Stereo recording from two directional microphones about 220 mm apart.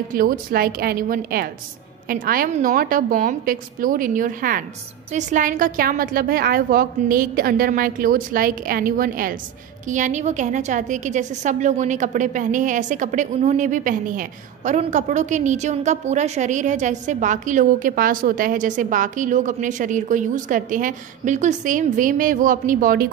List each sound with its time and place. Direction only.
0.1 s a woman's voice: 40° right (ahead or behind)